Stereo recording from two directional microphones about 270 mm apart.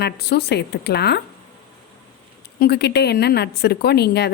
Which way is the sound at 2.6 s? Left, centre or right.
Left.